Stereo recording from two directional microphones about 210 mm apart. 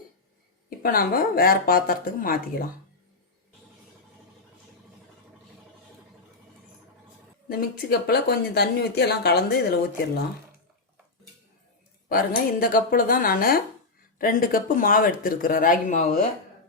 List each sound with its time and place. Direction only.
0.8 s speech: 45° left (ahead or behind)
7.4 s speech: 45° left (ahead or behind)
12.0 s speech: 45° left (ahead or behind)